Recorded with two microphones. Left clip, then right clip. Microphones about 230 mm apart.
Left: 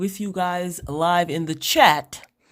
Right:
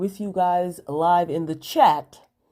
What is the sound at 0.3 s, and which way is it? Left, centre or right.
A woman's voice, left.